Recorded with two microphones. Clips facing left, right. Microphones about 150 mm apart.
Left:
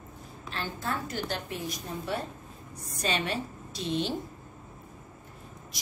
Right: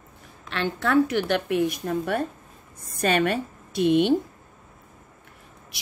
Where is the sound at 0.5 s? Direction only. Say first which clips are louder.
Right 9 dB; 75° right (ahead or behind).